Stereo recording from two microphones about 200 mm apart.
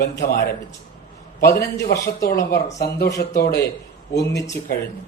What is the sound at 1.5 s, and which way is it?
Speech, 15° left (ahead or behind).